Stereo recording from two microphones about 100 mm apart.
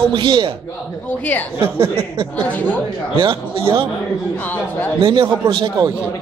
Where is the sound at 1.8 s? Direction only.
65° right (ahead or behind).